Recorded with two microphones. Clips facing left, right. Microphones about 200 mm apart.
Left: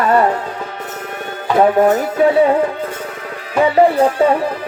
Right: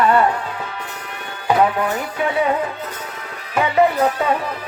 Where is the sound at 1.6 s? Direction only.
40° left (ahead or behind).